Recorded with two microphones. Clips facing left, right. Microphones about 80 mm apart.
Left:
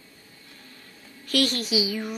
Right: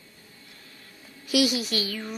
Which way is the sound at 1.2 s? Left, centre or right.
Centre.